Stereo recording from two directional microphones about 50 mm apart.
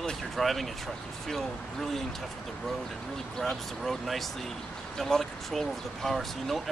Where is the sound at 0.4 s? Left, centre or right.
Centre.